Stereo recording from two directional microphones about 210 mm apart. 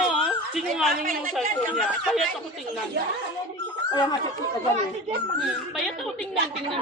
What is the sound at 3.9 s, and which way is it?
Speech, 20° left (ahead or behind).